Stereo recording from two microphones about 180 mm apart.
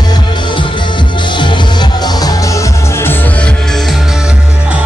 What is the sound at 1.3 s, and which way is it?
Music, 25° left (ahead or behind).